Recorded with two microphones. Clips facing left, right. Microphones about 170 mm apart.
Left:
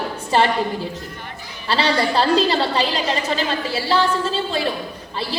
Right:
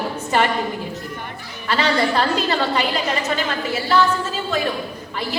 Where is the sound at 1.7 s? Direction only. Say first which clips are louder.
Even; 30° left (ahead or behind).